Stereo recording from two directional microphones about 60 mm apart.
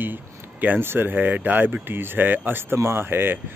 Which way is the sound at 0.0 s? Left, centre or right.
Right.